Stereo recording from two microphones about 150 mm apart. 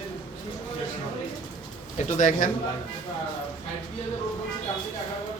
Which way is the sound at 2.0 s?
60° left (ahead or behind).